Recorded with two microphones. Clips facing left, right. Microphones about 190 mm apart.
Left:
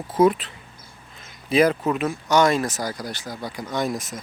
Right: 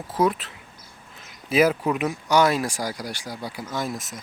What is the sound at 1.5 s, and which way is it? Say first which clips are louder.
Speech: left 1 dB; 5° right (ahead or behind).